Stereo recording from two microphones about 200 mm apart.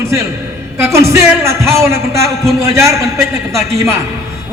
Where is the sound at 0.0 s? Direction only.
15° right (ahead or behind).